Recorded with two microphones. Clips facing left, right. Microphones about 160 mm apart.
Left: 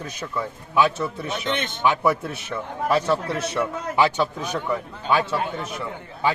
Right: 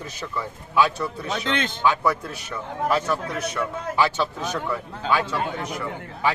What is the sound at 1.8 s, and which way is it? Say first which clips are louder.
A man's voice: left 2 dB; 20° left (ahead or behind).